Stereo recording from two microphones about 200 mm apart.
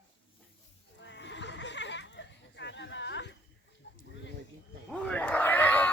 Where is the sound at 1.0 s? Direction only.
60° left (ahead or behind).